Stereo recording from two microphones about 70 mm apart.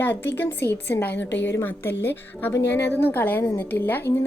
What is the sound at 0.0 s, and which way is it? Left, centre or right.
A woman's voice, left.